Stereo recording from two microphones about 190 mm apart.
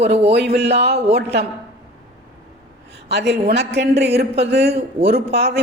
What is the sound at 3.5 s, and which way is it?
A man's voice, 65° right (ahead or behind).